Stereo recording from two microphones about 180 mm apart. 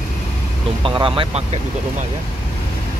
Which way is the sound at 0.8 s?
30° right (ahead or behind).